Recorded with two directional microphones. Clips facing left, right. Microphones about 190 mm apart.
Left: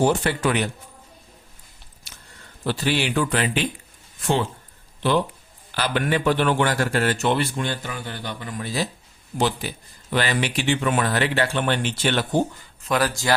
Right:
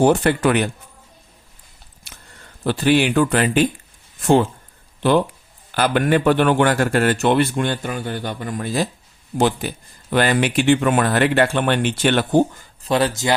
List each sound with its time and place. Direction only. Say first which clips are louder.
0.0 s speech: right 5 dB; 55° right (ahead or behind)
2.6 s a man's voice: right 7 dB; 50° right (ahead or behind)
5.7 s a man's voice: right 6 dB; 50° right (ahead or behind)
12.8 s speech: right 4 dB; 25° right (ahead or behind)